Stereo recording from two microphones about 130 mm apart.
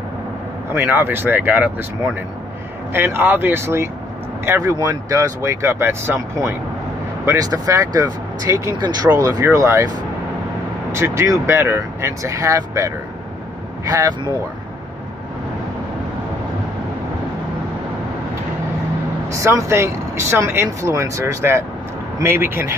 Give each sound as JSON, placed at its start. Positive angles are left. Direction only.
{"t": 0.7, "sound": "speech", "side_deg": -15}
{"t": 2.9, "sound": "speech", "side_deg": -15}
{"t": 19.7, "sound": "speech", "side_deg": -20}